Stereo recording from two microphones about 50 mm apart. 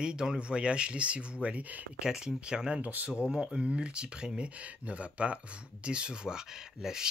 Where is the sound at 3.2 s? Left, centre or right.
Centre.